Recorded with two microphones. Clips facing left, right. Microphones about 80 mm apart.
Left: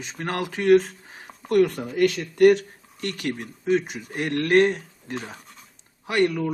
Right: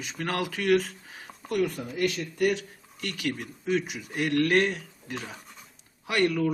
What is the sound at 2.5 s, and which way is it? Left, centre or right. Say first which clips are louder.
Speech: left 10 dB; left.